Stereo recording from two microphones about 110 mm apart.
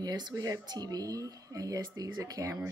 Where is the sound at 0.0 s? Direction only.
35° right (ahead or behind).